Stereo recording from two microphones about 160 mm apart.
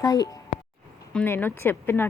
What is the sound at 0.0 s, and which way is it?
Speech, 20° left (ahead or behind).